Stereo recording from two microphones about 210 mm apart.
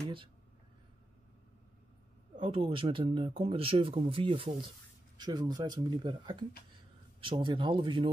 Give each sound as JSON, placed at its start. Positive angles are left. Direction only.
{"t": 2.3, "sound": "speech", "side_deg": -25}